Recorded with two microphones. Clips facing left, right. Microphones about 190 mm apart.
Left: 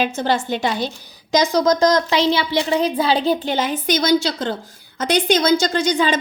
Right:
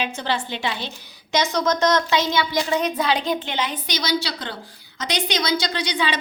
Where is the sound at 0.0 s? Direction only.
45° left (ahead or behind).